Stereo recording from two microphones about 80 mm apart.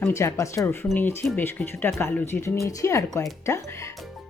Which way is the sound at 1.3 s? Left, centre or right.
Left.